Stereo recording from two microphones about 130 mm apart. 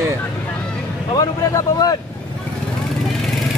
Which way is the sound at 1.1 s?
30° left (ahead or behind).